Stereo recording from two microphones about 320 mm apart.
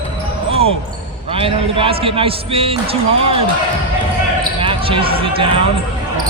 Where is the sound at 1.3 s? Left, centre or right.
Centre.